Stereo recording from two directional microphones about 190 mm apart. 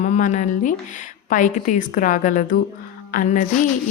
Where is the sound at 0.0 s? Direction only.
40° left (ahead or behind).